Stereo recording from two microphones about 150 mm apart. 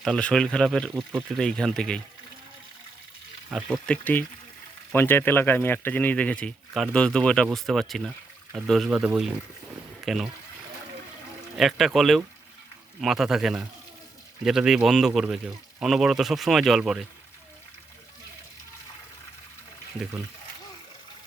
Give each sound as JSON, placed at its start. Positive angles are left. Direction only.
{"t": 0.0, "sound": "speech", "side_deg": 5}
{"t": 3.5, "sound": "speech", "side_deg": 0}
{"t": 3.9, "sound": "speech", "side_deg": 10}
{"t": 11.5, "sound": "speech", "side_deg": 0}